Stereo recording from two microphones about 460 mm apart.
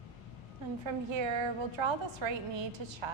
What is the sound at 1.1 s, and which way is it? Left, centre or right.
A woman's voice, right.